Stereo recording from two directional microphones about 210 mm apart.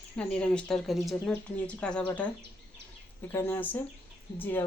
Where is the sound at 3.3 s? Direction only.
10° left (ahead or behind).